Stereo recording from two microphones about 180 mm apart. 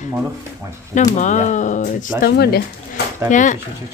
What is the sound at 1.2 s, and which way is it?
Speech, 40° left (ahead or behind).